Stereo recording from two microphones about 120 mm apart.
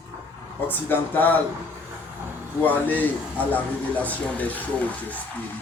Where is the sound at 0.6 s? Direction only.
15° left (ahead or behind).